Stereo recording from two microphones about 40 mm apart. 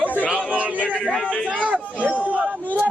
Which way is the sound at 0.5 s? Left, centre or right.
Right.